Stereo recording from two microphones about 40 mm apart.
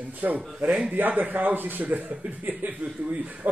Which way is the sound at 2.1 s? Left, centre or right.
Right.